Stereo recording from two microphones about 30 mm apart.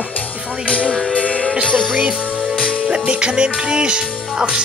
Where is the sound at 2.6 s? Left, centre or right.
Right.